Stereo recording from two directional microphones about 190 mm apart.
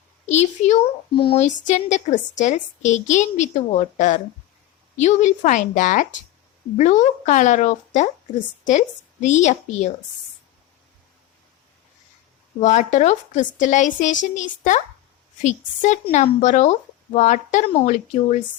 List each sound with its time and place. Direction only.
0.3 s a woman's voice: 35° left (ahead or behind)
9.2 s a woman's voice: 40° left (ahead or behind)
12.5 s a woman's voice: 40° left (ahead or behind)